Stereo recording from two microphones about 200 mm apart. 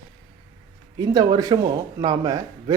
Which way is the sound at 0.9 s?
20° right (ahead or behind).